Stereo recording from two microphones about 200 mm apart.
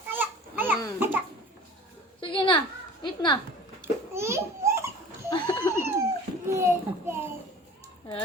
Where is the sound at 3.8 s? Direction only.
15° right (ahead or behind).